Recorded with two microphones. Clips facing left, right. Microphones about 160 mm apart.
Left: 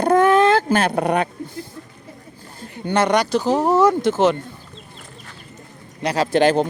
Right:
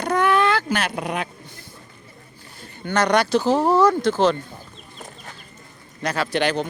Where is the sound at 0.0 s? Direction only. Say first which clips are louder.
Left 5 dB; 45° left (ahead or behind).